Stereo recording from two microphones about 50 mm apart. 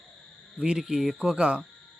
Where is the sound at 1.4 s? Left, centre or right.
Right.